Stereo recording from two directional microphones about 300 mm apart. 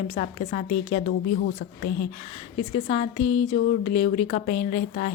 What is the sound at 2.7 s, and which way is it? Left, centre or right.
A woman's voice, centre.